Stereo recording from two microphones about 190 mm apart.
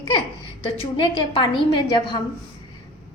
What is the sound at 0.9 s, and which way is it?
A woman's voice, 25° left (ahead or behind).